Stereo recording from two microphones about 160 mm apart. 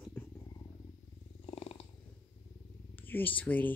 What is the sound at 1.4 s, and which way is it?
Purr, 35° left (ahead or behind).